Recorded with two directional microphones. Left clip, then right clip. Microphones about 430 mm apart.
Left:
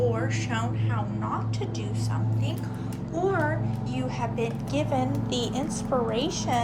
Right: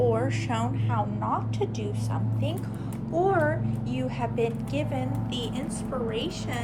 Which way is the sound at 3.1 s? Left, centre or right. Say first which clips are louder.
Right 2 dB; centre.